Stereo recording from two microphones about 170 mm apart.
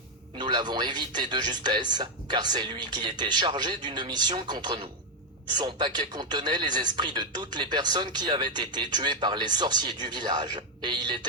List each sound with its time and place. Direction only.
0.3 s speech: 25° right (ahead or behind)